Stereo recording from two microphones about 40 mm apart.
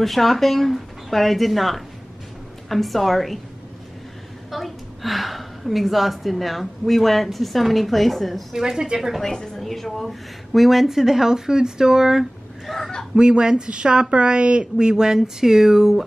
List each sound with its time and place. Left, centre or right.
0.0 s speech: centre
4.5 s a woman's voice: centre
8.5 s speech: centre
9.2 s a woman's voice: centre
13.1 s a woman's voice: right